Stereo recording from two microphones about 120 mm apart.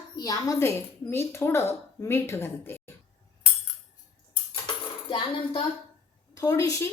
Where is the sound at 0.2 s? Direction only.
30° left (ahead or behind).